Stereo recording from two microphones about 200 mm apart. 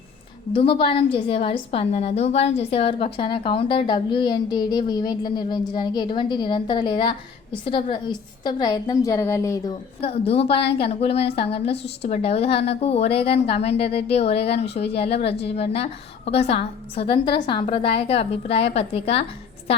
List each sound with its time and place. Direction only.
0.5 s a woman's voice: 25° left (ahead or behind)
10.0 s a woman's voice: 30° left (ahead or behind)